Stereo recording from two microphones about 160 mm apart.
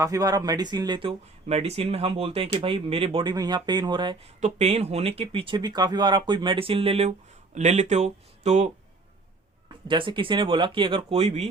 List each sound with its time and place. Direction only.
0.0 s speech: 20° right (ahead or behind)
4.4 s speech: 45° right (ahead or behind)
9.8 s speech: 30° right (ahead or behind)